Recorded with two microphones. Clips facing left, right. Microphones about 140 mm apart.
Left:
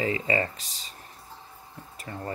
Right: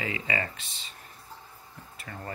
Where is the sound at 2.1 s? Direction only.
25° left (ahead or behind).